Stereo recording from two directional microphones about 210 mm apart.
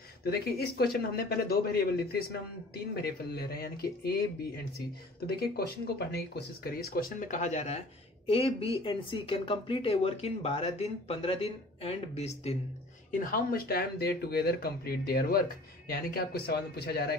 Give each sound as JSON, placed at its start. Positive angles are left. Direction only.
{"t": 0.2, "sound": "speech", "side_deg": 50}
{"t": 5.9, "sound": "speech", "side_deg": 50}
{"t": 13.2, "sound": "speech", "side_deg": 45}